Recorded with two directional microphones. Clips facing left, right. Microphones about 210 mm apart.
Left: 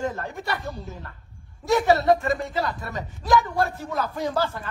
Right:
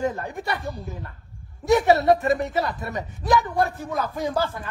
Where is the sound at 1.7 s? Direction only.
20° right (ahead or behind).